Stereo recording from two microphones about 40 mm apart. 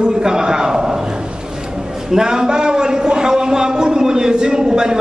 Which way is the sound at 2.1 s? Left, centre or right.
Centre.